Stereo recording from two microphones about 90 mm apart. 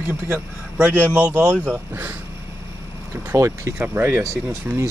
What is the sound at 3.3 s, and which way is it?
Speech, 35° right (ahead or behind).